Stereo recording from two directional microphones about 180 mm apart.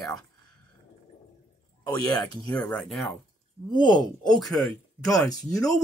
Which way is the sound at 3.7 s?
25° left (ahead or behind).